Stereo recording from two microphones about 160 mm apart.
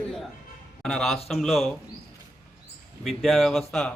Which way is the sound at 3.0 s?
Centre (ahead or behind).